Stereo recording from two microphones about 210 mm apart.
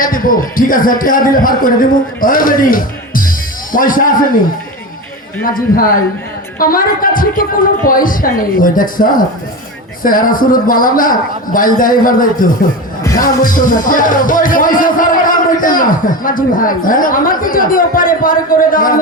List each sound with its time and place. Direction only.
0.0 s music: 40° left (ahead or behind)
5.4 s a woman's voice: 45° left (ahead or behind)
7.9 s music: 40° left (ahead or behind)